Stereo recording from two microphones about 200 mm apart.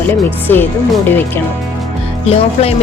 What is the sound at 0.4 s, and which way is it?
Speech, 10° left (ahead or behind).